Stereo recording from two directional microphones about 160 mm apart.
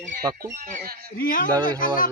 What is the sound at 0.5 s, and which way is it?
Speech, 60° right (ahead or behind).